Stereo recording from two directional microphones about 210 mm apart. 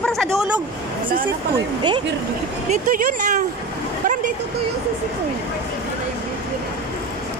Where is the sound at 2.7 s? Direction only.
40° right (ahead or behind).